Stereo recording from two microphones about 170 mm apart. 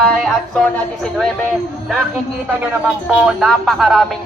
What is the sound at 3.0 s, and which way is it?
Music, 5° right (ahead or behind).